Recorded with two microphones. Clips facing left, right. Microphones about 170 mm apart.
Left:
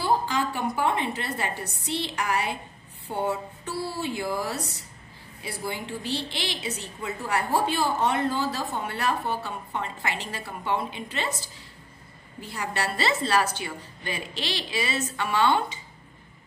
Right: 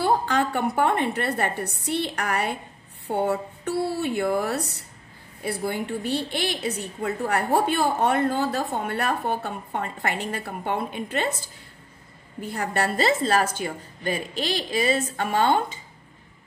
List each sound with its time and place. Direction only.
0.0 s a woman's voice: 60° right (ahead or behind)
12.4 s a woman's voice: 55° right (ahead or behind)